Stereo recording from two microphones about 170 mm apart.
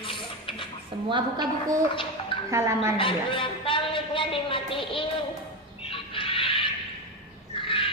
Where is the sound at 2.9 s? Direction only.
30° left (ahead or behind).